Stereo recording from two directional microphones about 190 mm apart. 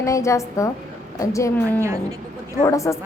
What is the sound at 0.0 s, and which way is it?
A woman's voice, 15° left (ahead or behind).